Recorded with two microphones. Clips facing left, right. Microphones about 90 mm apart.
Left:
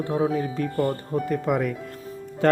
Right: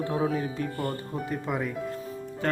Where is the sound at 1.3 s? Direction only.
70° left (ahead or behind).